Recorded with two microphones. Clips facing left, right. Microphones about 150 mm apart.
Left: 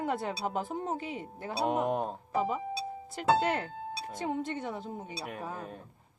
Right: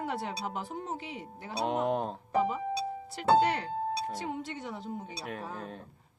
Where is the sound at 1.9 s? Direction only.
15° left (ahead or behind).